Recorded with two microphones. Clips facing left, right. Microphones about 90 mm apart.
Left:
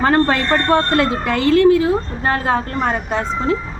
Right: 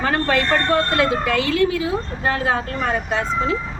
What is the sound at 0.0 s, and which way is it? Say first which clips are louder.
A woman's voice: left 4 dB; 40° left (ahead or behind).